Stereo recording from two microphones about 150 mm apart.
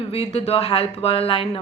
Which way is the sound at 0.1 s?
40° left (ahead or behind).